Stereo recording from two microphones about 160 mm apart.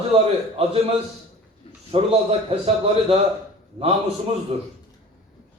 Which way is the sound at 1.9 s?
35° right (ahead or behind).